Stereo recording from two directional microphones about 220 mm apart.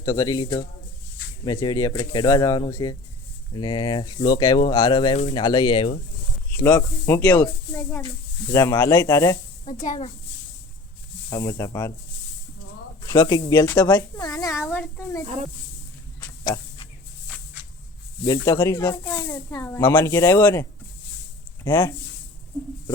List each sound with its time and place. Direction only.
0.0 s speech: 15° left (ahead or behind)
6.5 s speech: 10° left (ahead or behind)
9.6 s speech: 35° left (ahead or behind)
11.3 s speech: 15° left (ahead or behind)
13.0 s speech: 15° left (ahead or behind)
18.3 s speech: 10° left (ahead or behind)